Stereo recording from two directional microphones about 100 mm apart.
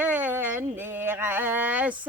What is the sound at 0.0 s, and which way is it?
Yodeling, 20° right (ahead or behind).